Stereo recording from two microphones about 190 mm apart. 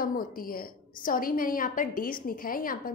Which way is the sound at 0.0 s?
50° left (ahead or behind).